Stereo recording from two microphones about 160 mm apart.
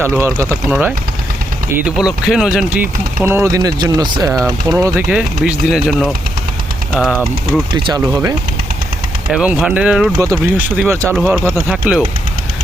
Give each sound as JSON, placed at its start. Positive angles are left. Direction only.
{"t": 0.2, "sound": "speech", "side_deg": -15}
{"t": 5.0, "sound": "speech", "side_deg": -5}
{"t": 8.0, "sound": "speech", "side_deg": -20}
{"t": 9.3, "sound": "speech", "side_deg": -5}